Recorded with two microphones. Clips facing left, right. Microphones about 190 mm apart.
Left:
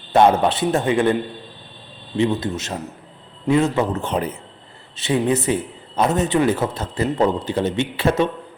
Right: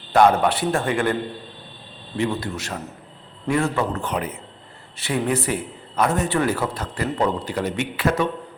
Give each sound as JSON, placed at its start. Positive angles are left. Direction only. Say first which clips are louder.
{"t": 0.1, "sound": "a man's voice", "louder": "left 1 dB", "side_deg": 20}
{"t": 2.1, "sound": "a man's voice", "louder": "left 4 dB", "side_deg": 20}